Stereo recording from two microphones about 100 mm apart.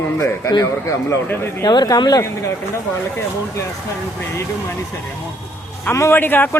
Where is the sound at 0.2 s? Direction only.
30° left (ahead or behind).